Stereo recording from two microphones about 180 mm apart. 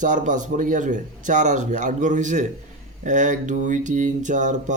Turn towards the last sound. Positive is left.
turn(degrees=-45)  # may be behind; listen again after turning